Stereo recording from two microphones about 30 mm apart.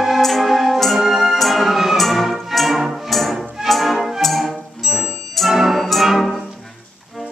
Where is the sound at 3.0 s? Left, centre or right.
Centre.